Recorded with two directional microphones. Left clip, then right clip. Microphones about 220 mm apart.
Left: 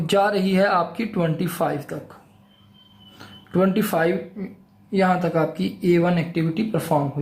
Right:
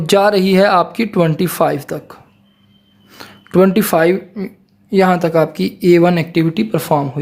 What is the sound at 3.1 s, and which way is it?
Speech, 50° right (ahead or behind).